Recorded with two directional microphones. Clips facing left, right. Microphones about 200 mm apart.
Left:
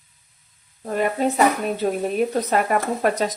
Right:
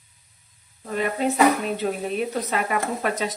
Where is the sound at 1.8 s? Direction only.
35° left (ahead or behind).